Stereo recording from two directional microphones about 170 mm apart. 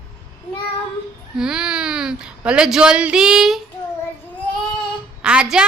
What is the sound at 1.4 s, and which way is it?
Speech, 5° right (ahead or behind).